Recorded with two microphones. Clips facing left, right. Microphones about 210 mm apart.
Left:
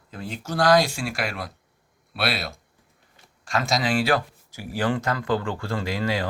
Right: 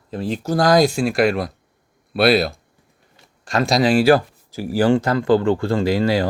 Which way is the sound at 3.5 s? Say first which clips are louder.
Right 7 dB; 40° right (ahead or behind).